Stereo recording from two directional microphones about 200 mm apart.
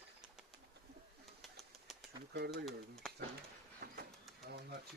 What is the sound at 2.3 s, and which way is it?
Speech, 55° right (ahead or behind).